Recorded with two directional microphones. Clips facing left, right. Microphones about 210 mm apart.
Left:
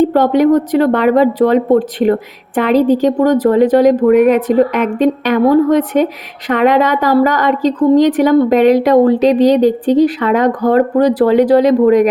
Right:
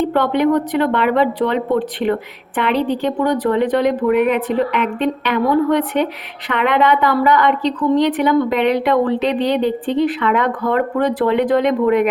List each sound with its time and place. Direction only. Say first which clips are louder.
0.0 s a woman's voice: left 6 dB; 40° left (ahead or behind)